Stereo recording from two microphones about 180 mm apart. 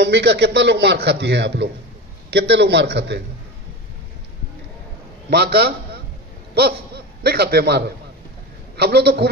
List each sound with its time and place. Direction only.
0.0 s a man's voice: 70° right (ahead or behind)
5.3 s a woman's voice: 65° right (ahead or behind)
7.2 s a woman's voice: 60° right (ahead or behind)